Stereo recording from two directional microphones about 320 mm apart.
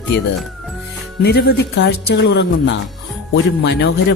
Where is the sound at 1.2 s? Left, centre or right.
Left.